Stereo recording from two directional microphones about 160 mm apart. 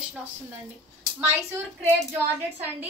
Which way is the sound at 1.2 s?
15° right (ahead or behind).